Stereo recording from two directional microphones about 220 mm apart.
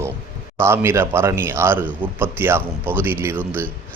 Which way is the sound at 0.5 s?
10° right (ahead or behind).